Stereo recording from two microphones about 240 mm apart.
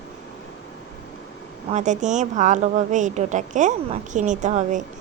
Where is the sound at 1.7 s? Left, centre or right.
Right.